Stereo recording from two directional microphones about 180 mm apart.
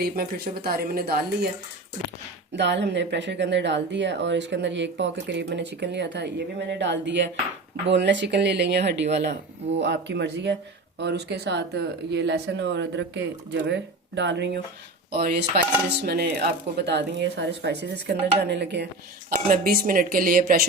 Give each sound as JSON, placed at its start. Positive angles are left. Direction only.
{"t": 0.0, "sound": "speech", "side_deg": -55}
{"t": 2.6, "sound": "speech", "side_deg": -75}
{"t": 15.1, "sound": "speech", "side_deg": -60}
{"t": 19.3, "sound": "speech", "side_deg": -55}